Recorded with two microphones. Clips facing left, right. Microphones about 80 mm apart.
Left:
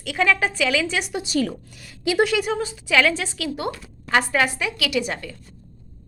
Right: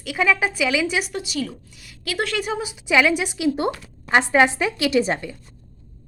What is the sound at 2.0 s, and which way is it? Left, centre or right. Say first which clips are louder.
Speech: left 6 dB; left.